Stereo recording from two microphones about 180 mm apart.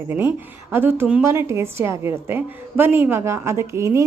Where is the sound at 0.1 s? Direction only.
10° right (ahead or behind).